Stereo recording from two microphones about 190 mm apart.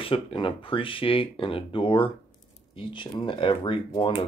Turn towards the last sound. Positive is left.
turn(degrees=25)  # may be behind; listen again after turning